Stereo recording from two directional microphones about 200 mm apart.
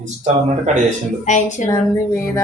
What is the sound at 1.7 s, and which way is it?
Speech, 15° left (ahead or behind).